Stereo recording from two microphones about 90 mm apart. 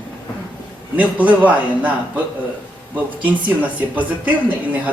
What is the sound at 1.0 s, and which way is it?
Speech, 15° right (ahead or behind).